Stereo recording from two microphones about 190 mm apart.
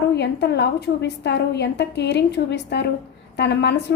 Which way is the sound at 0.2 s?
65° left (ahead or behind).